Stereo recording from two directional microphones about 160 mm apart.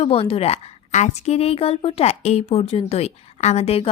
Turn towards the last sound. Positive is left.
turn(degrees=40)  # may be behind; listen again after turning